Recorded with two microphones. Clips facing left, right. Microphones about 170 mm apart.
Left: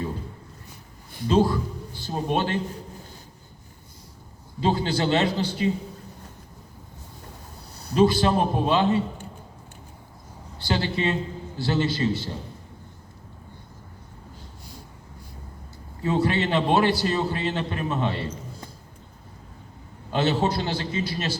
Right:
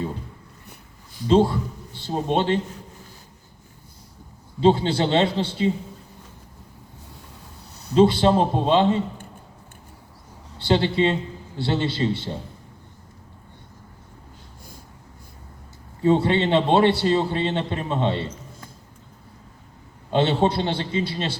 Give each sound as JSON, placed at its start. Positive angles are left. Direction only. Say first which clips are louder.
{"t": 1.3, "sound": "speech", "louder": "right 3 dB", "side_deg": -25}
{"t": 4.6, "sound": "a man's voice", "louder": "right 5 dB", "side_deg": -25}
{"t": 7.9, "sound": "a man's voice", "louder": "right 3 dB", "side_deg": -25}
{"t": 10.6, "sound": "a man's voice", "louder": "right 6 dB", "side_deg": -25}
{"t": 16.0, "sound": "a man's voice", "louder": "right 4 dB", "side_deg": -25}
{"t": 20.1, "sound": "a man's voice", "louder": "right 3 dB", "side_deg": -25}